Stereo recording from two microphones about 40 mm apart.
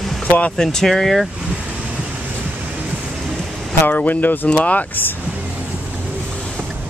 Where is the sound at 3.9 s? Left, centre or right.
Left.